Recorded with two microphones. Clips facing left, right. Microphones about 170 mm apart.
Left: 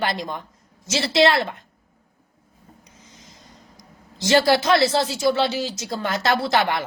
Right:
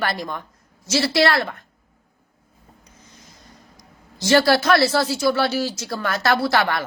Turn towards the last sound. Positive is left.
turn(degrees=20)  # may be behind; listen again after turning